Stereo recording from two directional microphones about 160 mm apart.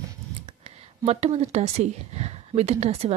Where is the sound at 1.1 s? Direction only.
40° right (ahead or behind).